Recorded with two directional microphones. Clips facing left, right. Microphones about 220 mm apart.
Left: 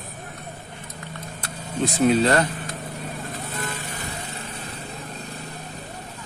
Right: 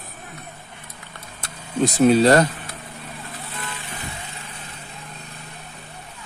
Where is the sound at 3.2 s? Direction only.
45° left (ahead or behind).